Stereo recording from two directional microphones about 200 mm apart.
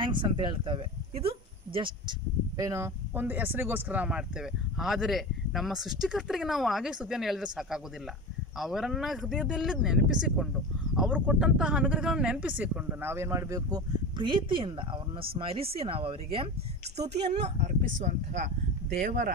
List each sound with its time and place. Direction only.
0.0 s speech: 25° right (ahead or behind)